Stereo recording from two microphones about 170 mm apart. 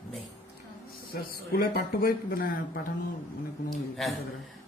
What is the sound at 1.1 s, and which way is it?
Speech, 60° left (ahead or behind).